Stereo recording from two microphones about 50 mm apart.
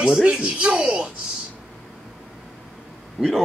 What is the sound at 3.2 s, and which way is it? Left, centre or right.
Speech, centre.